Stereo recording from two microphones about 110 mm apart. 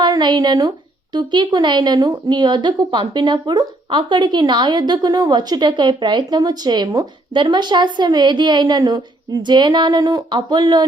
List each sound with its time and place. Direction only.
0.0 s a woman's voice: 40° right (ahead or behind)